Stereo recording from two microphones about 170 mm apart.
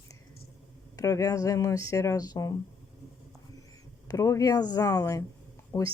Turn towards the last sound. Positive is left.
turn(degrees=15)  # may be behind; listen again after turning